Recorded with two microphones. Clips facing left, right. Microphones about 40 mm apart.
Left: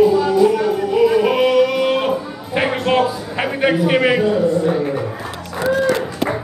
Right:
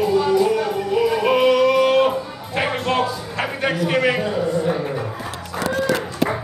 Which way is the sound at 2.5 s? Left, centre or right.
Centre.